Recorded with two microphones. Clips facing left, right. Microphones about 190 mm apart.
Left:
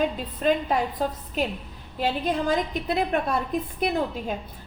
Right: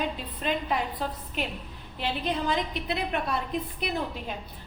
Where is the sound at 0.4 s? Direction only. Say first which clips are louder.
Left 6 dB; 45° left (ahead or behind).